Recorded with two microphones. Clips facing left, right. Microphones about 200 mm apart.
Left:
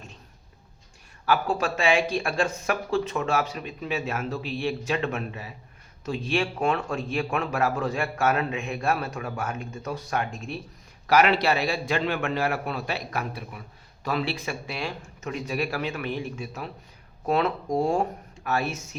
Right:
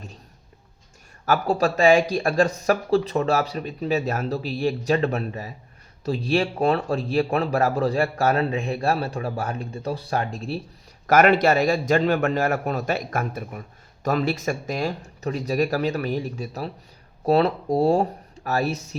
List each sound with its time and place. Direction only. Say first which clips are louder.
1.2 s speech: right 4 dB; 40° right (ahead or behind)
11.0 s a man's voice: right 4 dB; 50° right (ahead or behind)